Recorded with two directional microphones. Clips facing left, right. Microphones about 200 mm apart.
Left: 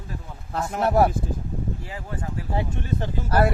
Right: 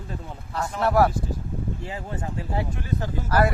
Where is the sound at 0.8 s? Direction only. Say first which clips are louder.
Even; 20° left (ahead or behind).